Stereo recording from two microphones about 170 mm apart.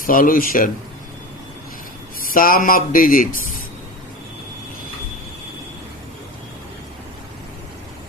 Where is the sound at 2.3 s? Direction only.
55° left (ahead or behind).